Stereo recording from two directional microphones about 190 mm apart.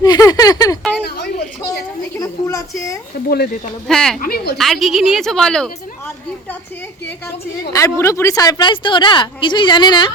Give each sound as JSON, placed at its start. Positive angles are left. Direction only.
{"t": 0.0, "sound": "a sound", "side_deg": 20}
{"t": 2.1, "sound": "a sound", "side_deg": 20}
{"t": 3.2, "sound": "speech", "side_deg": 55}
{"t": 3.8, "sound": "speech", "side_deg": 5}
{"t": 4.2, "sound": "speech", "side_deg": 55}
{"t": 4.5, "sound": "speech", "side_deg": 0}
{"t": 7.7, "sound": "speech", "side_deg": 15}